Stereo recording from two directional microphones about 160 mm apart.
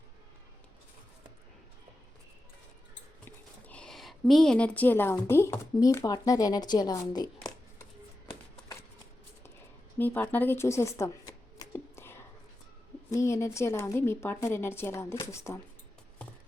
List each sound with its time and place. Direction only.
3.2 s speech: 10° left (ahead or behind); by 7.3 s 25° left (ahead or behind)
10.0 s shuffling cards: 10° left (ahead or behind)
13.1 s a woman's voice: 20° left (ahead or behind)